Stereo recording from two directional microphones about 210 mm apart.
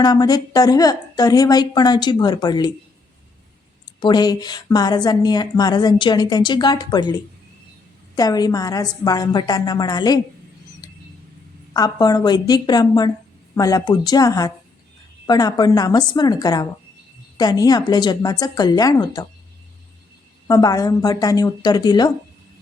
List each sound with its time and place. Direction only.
0.0 s a woman's voice: 20° left (ahead or behind)
4.0 s a woman's voice: 20° left (ahead or behind)
10.8 s bird: 20° left (ahead or behind)
11.7 s a woman's voice: 20° left (ahead or behind)
20.5 s a woman's voice: 15° left (ahead or behind)